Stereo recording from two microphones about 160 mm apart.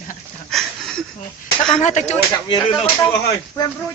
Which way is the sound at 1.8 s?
50° left (ahead or behind).